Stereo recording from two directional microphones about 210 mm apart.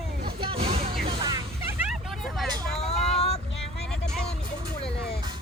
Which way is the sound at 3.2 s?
30° left (ahead or behind).